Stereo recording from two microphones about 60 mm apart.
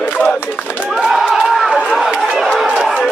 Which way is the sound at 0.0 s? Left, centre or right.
Left.